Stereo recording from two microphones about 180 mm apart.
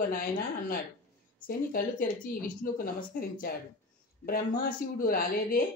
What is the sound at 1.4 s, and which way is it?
A woman's voice, 50° left (ahead or behind).